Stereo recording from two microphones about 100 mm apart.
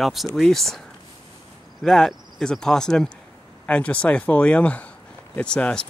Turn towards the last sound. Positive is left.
turn(degrees=10)  # may be behind; listen again after turning